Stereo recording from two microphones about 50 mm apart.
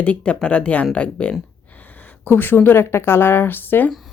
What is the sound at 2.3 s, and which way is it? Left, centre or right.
Speech, left.